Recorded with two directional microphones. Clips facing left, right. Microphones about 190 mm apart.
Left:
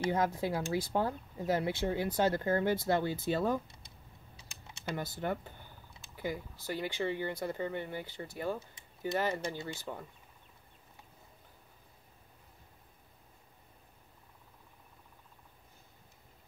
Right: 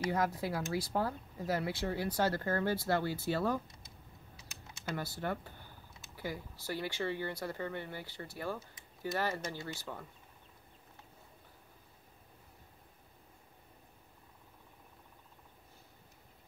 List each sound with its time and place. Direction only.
0.0 s speech: 25° left (ahead or behind)
4.9 s speech: 15° left (ahead or behind)